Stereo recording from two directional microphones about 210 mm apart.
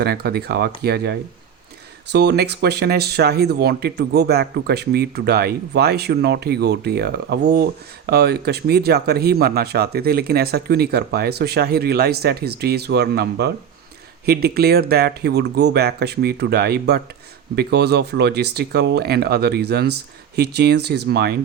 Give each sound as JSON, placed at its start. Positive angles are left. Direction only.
{"t": 0.0, "sound": "speech", "side_deg": -50}